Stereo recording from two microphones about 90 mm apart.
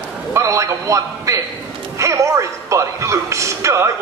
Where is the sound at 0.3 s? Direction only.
35° right (ahead or behind).